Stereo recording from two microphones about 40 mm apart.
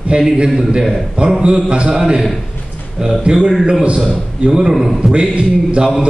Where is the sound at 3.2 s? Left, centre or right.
Centre.